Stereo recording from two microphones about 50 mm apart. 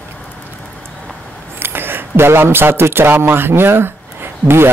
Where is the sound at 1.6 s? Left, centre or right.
Right.